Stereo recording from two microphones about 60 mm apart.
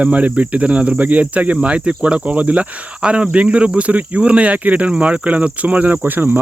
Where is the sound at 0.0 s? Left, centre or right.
Right.